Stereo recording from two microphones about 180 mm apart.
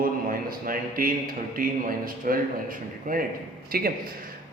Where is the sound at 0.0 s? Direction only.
50° right (ahead or behind).